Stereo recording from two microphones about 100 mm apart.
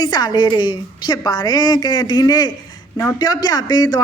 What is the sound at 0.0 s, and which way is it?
A woman's voice, 45° left (ahead or behind).